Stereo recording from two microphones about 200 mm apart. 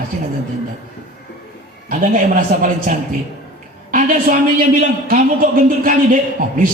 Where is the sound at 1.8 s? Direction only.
40° right (ahead or behind).